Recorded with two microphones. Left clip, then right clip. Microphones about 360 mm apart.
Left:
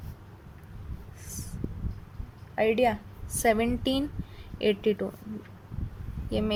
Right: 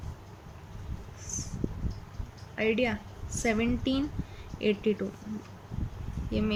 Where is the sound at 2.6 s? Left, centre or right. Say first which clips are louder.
Left 4 dB; centre.